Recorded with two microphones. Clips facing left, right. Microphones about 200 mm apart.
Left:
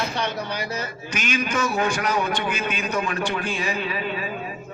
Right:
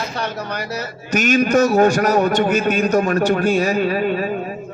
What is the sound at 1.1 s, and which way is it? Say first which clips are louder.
A man's voice: right 11 dB; 45° right (ahead or behind).